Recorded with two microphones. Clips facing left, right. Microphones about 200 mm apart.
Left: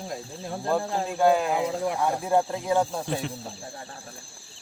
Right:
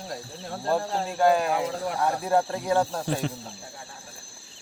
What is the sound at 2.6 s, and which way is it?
Speech, 10° left (ahead or behind).